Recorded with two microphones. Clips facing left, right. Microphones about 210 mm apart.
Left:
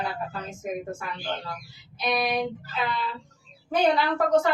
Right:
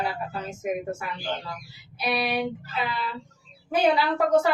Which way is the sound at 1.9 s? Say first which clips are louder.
Even; 5° right (ahead or behind).